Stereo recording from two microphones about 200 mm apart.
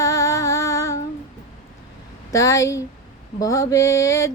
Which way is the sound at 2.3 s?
15° left (ahead or behind).